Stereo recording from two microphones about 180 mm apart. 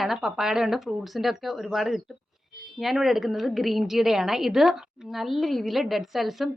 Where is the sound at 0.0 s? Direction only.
Centre (ahead or behind).